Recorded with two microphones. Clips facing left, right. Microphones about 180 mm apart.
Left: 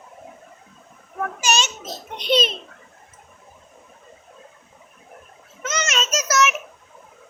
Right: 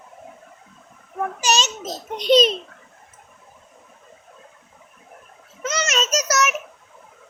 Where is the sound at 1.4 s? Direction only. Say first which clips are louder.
Right 1 dB; 35° right (ahead or behind).